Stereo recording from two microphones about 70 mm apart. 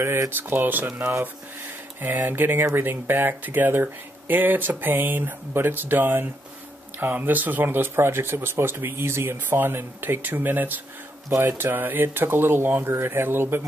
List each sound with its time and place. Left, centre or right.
0.4 s speech: right